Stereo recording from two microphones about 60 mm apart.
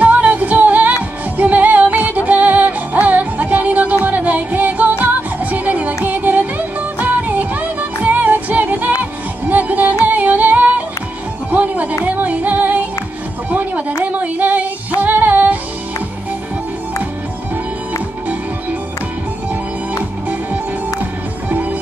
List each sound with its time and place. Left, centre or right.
0.0 s music: right
14.1 s child singing: right
15.0 s music: right